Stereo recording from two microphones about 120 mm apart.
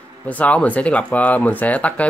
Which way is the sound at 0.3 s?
10° left (ahead or behind).